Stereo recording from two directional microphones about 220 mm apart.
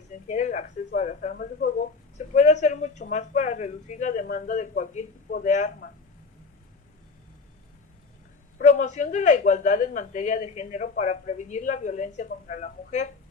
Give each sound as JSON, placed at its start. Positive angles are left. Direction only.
{"t": 0.3, "sound": "speech", "side_deg": 35}
{"t": 8.5, "sound": "speech", "side_deg": 35}